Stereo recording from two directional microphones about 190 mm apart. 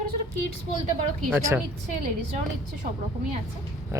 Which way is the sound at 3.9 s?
15° right (ahead or behind).